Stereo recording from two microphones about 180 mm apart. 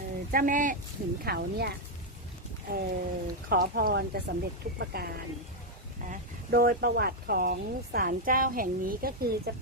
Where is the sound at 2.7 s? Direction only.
55° right (ahead or behind).